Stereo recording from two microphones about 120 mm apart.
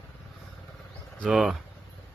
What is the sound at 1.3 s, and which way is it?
Speech, 5° right (ahead or behind).